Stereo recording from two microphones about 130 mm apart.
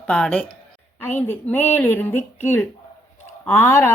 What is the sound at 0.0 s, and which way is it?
A woman's voice, 5° left (ahead or behind).